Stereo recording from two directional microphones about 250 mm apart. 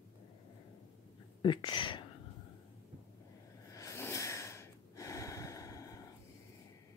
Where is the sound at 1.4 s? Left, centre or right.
Centre.